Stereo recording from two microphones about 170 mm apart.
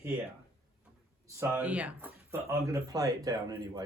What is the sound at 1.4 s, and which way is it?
Speech, 10° right (ahead or behind).